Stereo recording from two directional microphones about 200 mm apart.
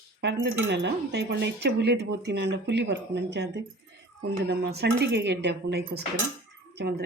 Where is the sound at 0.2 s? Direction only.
65° right (ahead or behind).